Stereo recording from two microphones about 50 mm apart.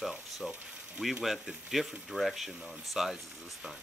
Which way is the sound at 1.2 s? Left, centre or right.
Centre.